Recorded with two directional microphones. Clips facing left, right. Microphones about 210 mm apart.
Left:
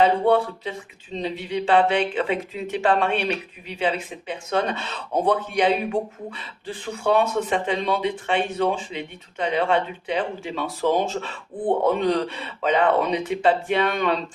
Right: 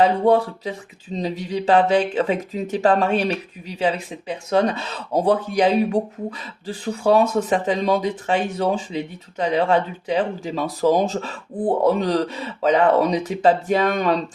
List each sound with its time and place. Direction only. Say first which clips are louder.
0.0 s speech: right 2 dB; 40° right (ahead or behind)